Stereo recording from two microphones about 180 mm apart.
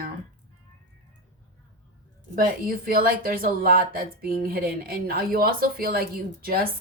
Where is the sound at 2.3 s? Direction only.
55° right (ahead or behind).